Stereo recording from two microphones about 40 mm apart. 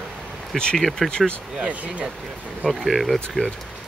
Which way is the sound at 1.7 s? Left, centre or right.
Right.